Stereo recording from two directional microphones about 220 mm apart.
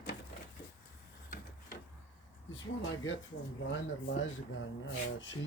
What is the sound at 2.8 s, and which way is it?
Speech, 60° left (ahead or behind).